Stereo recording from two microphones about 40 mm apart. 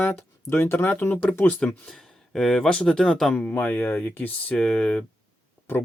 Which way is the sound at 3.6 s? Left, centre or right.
Left.